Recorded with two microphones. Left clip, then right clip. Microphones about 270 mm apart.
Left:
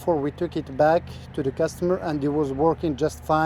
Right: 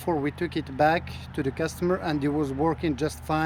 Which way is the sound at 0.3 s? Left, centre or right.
Centre.